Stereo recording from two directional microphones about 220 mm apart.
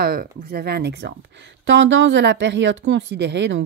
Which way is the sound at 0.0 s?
45° right (ahead or behind).